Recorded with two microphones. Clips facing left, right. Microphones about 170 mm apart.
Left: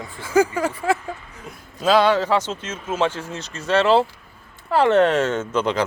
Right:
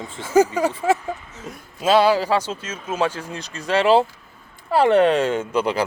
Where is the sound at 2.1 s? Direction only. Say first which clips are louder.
Even; 10° right (ahead or behind).